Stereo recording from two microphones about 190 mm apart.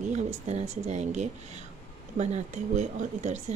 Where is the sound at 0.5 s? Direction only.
35° right (ahead or behind).